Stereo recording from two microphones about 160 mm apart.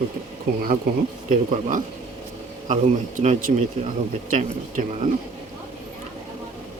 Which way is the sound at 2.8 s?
50° right (ahead or behind).